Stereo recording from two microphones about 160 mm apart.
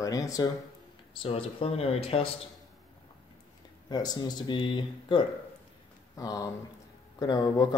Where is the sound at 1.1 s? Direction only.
35° left (ahead or behind).